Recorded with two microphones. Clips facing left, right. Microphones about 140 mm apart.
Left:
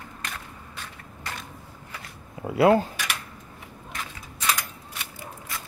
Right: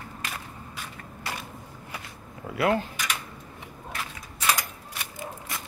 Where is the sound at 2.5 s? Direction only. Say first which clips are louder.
Left 6 dB; 30° left (ahead or behind).